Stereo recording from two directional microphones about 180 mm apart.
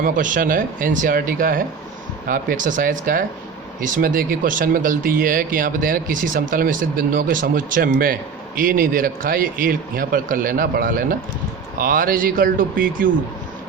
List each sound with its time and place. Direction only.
0.0 s speech: 50° right (ahead or behind)